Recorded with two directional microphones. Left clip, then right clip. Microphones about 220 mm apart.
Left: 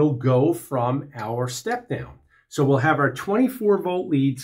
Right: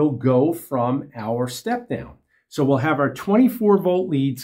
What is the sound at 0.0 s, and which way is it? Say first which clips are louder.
Speech: right 1 dB; 25° right (ahead or behind).